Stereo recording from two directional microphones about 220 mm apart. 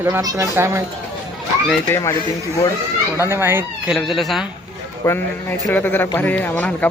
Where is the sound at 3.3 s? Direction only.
10° right (ahead or behind).